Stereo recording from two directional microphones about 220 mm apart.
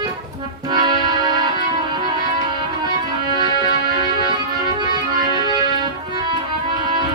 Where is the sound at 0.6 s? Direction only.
20° right (ahead or behind).